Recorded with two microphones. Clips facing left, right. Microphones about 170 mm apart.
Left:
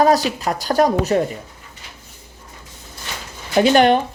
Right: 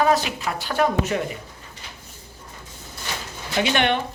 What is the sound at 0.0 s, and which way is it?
Speech, 40° left (ahead or behind).